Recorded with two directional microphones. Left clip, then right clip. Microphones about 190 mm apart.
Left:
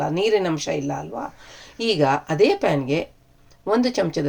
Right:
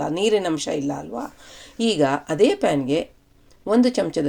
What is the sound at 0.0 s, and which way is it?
Speech, 35° right (ahead or behind).